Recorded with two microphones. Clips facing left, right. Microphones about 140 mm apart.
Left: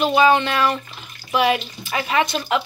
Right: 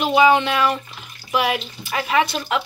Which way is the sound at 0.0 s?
10° right (ahead or behind).